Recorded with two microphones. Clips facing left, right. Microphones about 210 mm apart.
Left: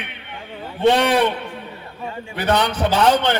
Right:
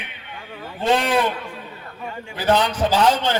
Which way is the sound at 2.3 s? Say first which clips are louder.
Right 1 dB; 65° left (ahead or behind).